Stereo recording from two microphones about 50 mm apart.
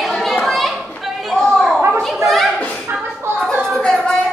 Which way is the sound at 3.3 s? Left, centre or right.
Right.